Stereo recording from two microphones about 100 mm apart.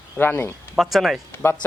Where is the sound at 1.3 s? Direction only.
25° left (ahead or behind).